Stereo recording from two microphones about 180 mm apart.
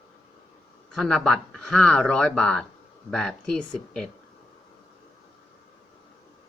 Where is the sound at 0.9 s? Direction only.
5° left (ahead or behind).